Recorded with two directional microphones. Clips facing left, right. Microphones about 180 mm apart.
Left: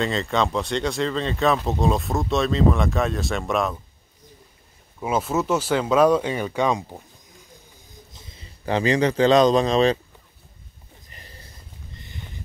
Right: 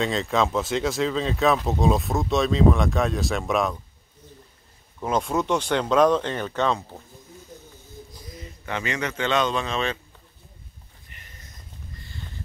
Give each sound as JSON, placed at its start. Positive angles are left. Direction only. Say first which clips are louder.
{"t": 0.0, "sound": "speech", "louder": "even", "side_deg": 0}
{"t": 5.0, "sound": "speech", "louder": "left 1 dB", "side_deg": 5}
{"t": 8.1, "sound": "speech", "louder": "right 7 dB", "side_deg": 25}
{"t": 11.1, "sound": "a sound", "louder": "left 4 dB", "side_deg": 35}